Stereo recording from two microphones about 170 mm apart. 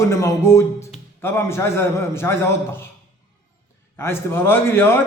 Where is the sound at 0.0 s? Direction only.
15° left (ahead or behind).